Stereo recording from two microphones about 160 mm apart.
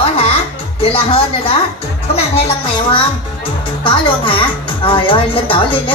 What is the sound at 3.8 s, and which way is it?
Speech, 30° left (ahead or behind).